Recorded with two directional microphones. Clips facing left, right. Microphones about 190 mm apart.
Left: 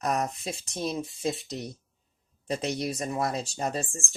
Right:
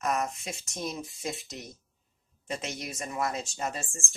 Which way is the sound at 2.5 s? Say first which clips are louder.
Left 7 dB; 35° left (ahead or behind).